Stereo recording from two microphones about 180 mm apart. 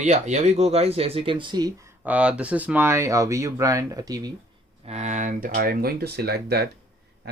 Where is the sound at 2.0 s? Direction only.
5° right (ahead or behind).